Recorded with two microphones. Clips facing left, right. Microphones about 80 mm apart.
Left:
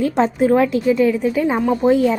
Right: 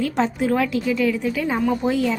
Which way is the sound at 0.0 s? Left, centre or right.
Left.